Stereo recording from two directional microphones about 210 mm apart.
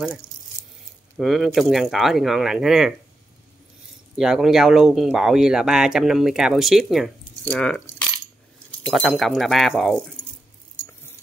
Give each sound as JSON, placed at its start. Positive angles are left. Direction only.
{"t": 1.1, "sound": "speech", "side_deg": 0}
{"t": 4.2, "sound": "speech", "side_deg": 0}
{"t": 8.8, "sound": "speech", "side_deg": 0}